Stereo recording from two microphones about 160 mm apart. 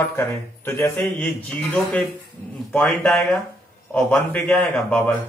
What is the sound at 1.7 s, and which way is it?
A man's voice, 5° left (ahead or behind).